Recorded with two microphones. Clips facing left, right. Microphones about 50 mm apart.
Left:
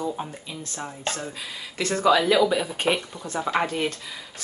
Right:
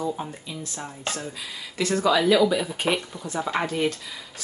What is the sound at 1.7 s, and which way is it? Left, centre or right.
Speech, left.